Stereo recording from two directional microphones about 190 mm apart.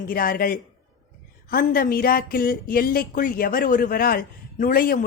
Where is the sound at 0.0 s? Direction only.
50° left (ahead or behind).